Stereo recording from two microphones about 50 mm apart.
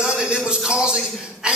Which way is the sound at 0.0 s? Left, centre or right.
Centre.